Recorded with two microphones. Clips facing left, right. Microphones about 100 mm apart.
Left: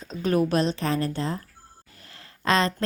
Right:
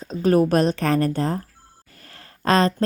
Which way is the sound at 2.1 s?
45° right (ahead or behind).